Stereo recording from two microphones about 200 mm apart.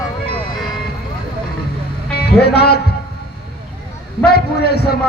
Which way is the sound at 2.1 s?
55° left (ahead or behind).